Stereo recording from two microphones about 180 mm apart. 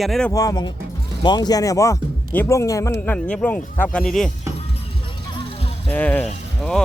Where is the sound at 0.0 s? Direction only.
Centre (ahead or behind).